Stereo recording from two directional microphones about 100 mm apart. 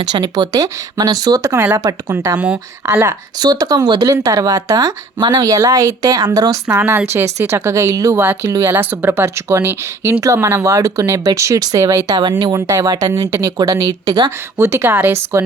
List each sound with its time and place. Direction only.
0.1 s speech: 45° right (ahead or behind)
3.4 s speech: 40° right (ahead or behind)
6.7 s speech: 25° right (ahead or behind)
8.1 s speech: 20° right (ahead or behind)
8.4 s speech: 35° right (ahead or behind)
8.7 s speech: 20° right (ahead or behind); by 14.3 s 45° right (ahead or behind)
14.3 s speech: 25° right (ahead or behind)